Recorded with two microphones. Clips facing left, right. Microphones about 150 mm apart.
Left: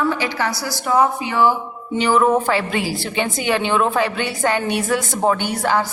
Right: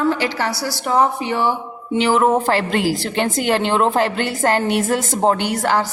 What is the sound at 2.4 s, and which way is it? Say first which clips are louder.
Speech: right 1 dB; centre (ahead or behind).